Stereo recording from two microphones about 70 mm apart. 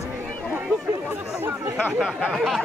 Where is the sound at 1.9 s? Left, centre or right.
Centre.